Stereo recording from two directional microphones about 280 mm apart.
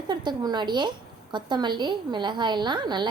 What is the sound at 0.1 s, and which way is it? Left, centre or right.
A woman's voice, centre.